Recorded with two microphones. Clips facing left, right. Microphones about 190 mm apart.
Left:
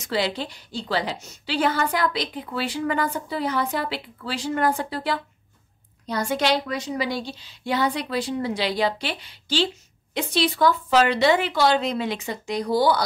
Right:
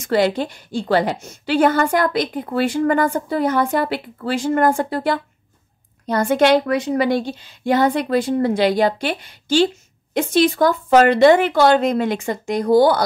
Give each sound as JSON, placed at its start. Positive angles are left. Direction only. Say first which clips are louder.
{"t": 0.0, "sound": "a woman's voice", "louder": "right 8 dB", "side_deg": -50}